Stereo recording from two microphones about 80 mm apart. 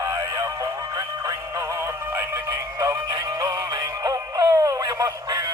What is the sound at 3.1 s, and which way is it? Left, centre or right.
Synthetic singing, right.